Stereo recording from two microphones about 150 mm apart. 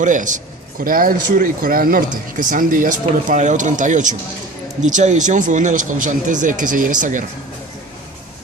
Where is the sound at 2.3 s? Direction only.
60° right (ahead or behind).